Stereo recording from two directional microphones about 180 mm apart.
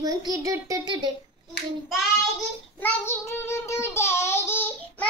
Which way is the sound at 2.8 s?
10° left (ahead or behind).